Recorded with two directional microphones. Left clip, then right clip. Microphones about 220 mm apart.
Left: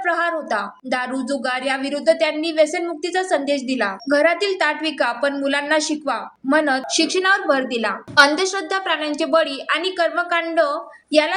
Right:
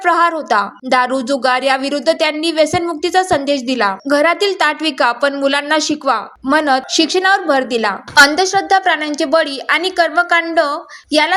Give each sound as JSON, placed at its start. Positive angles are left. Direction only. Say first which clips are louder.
{"t": 0.0, "sound": "speech", "louder": "right 7 dB", "side_deg": -35}